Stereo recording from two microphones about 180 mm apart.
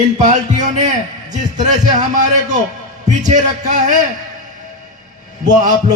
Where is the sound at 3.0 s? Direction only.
45° right (ahead or behind).